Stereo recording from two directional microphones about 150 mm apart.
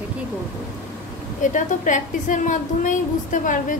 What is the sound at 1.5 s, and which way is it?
A woman's voice, 60° left (ahead or behind).